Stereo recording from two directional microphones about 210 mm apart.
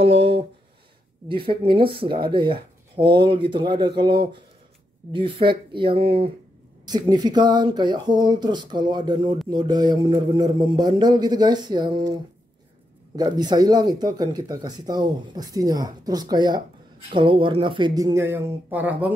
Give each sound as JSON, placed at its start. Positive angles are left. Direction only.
{"t": 0.0, "sound": "a sound", "side_deg": -25}
{"t": 1.3, "sound": "speech", "side_deg": -25}
{"t": 13.1, "sound": "speech", "side_deg": -20}